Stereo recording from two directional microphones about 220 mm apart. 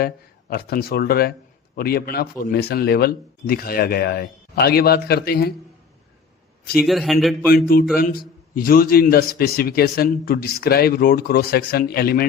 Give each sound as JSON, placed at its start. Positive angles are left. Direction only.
{"t": 0.5, "sound": "a man's voice", "side_deg": 45}
{"t": 6.7, "sound": "a man's voice", "side_deg": 0}
{"t": 7.7, "sound": "a man's voice", "side_deg": 40}